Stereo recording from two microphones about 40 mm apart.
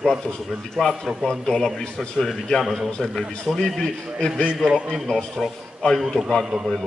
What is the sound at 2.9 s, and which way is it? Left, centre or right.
Speech, centre.